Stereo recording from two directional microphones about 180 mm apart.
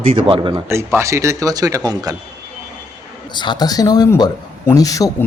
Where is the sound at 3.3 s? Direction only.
25° left (ahead or behind).